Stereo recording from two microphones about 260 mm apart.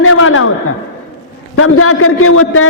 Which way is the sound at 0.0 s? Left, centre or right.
Left.